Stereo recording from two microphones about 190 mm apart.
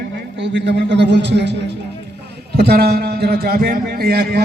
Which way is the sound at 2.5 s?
55° right (ahead or behind).